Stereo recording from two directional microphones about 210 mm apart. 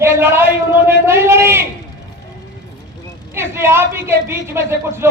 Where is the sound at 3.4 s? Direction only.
10° right (ahead or behind).